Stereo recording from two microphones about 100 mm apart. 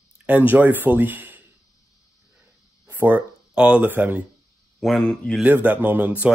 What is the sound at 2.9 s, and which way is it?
Speech, 20° right (ahead or behind).